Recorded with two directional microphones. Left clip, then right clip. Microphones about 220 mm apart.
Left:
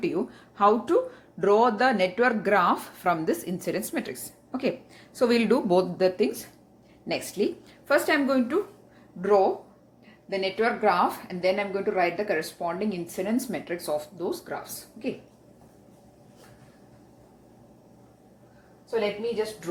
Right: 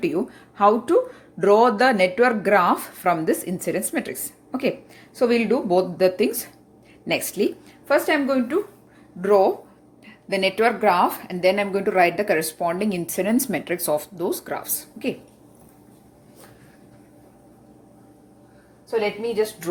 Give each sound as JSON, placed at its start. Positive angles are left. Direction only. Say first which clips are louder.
{"t": 0.0, "sound": "speech", "louder": "right 4 dB", "side_deg": -15}
{"t": 6.0, "sound": "speech", "louder": "right 4 dB", "side_deg": -10}
{"t": 9.2, "sound": "a woman's voice", "louder": "right 4 dB", "side_deg": -20}
{"t": 10.2, "sound": "speech", "louder": "right 6 dB", "side_deg": -35}